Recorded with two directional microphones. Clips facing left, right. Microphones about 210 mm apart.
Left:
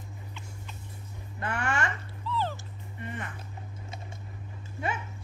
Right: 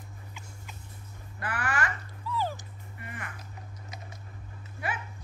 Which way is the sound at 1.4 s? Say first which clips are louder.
Left 2 dB; 25° left (ahead or behind).